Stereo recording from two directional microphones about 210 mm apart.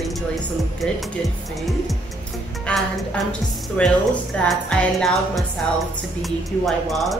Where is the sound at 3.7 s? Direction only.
5° left (ahead or behind).